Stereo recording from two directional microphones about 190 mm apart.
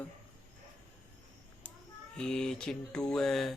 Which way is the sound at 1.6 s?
10° left (ahead or behind).